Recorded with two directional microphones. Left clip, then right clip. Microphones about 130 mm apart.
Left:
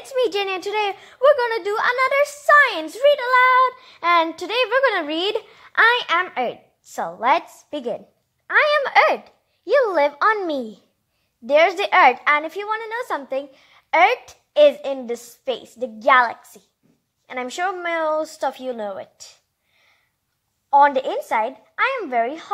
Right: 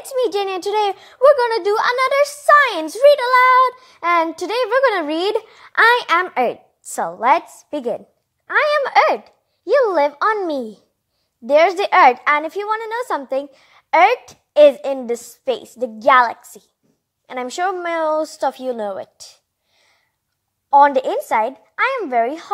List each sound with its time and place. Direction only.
0.2 s a woman's voice: 15° right (ahead or behind); by 19.2 s 45° right (ahead or behind)
20.7 s a woman's voice: 35° right (ahead or behind)